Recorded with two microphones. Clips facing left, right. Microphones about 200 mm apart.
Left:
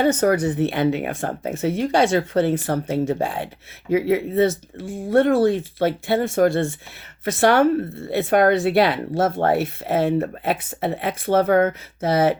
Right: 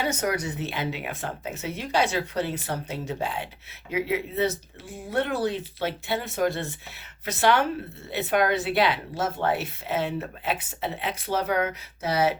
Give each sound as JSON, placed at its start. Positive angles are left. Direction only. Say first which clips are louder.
{"t": 0.0, "sound": "speech", "louder": "left 9 dB", "side_deg": 55}